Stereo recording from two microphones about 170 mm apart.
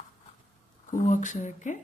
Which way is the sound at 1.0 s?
45° left (ahead or behind).